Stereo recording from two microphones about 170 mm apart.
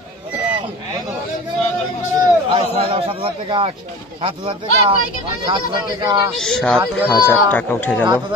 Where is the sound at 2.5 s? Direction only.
35° right (ahead or behind).